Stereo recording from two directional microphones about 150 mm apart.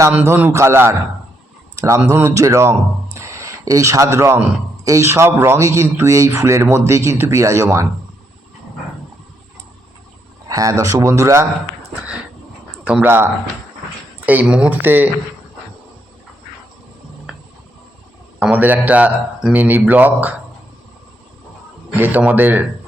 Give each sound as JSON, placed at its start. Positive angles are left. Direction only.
{"t": 0.3, "sound": "a man's voice", "side_deg": -15}
{"t": 1.7, "sound": "a sound", "side_deg": -20}
{"t": 2.0, "sound": "speech", "side_deg": -20}
{"t": 3.2, "sound": "a sound", "side_deg": -20}
{"t": 4.9, "sound": "speech", "side_deg": -20}
{"t": 10.5, "sound": "speech", "side_deg": -20}
{"t": 12.8, "sound": "a man's voice", "side_deg": -10}
{"t": 17.3, "sound": "a sound", "side_deg": -5}
{"t": 18.3, "sound": "a man's voice", "side_deg": -10}
{"t": 21.9, "sound": "a man's voice", "side_deg": -10}